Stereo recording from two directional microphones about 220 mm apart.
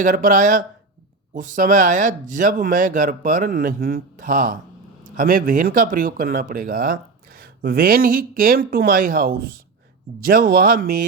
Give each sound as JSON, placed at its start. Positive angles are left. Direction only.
{"t": 0.0, "sound": "speech", "side_deg": -35}